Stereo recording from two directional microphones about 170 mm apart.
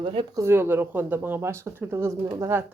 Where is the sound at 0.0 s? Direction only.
30° right (ahead or behind).